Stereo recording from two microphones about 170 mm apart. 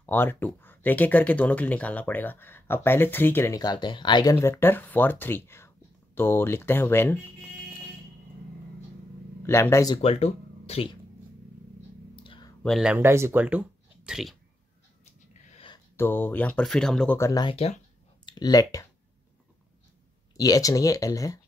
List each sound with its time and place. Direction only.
0.0 s speech: 10° left (ahead or behind)
9.5 s speech: 15° left (ahead or behind)
10.0 s speech: 35° left (ahead or behind)
12.2 s a sound: 30° left (ahead or behind)
12.6 s speech: centre (ahead or behind)
12.9 s speech: 15° right (ahead or behind)
15.4 s a sound: 40° left (ahead or behind)
16.0 s speech: 10° left (ahead or behind)
17.2 s speech: 25° left (ahead or behind)
20.3 s speech: 20° left (ahead or behind)